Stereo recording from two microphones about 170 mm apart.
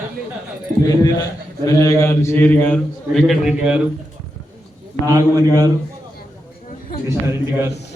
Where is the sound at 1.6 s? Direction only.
20° left (ahead or behind); by 3.8 s 5° right (ahead or behind).